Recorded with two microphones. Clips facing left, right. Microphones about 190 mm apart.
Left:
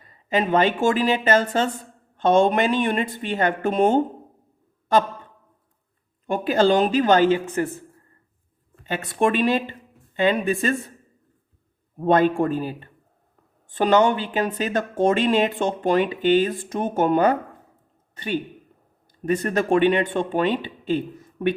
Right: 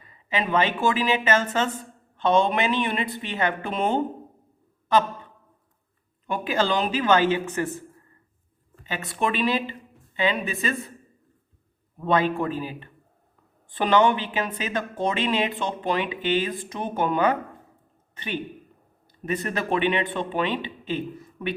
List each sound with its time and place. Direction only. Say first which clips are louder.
0.0 s speech: left 5 dB; 40° left (ahead or behind)
6.2 s a woman's voice: left 6 dB; 45° left (ahead or behind)
8.8 s speech: left 6 dB; 45° left (ahead or behind)
11.9 s speech: left 5 dB; 45° left (ahead or behind)
19.2 s speech: left 6 dB; 45° left (ahead or behind)